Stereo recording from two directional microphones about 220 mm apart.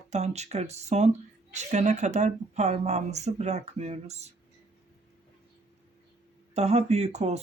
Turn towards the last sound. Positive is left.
turn(degrees=-30)  # may be behind; listen again after turning